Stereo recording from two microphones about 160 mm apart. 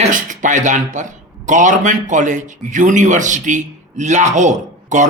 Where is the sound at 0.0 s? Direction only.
55° right (ahead or behind).